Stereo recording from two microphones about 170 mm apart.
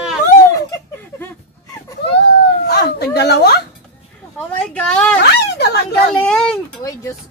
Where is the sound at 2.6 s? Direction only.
70° left (ahead or behind).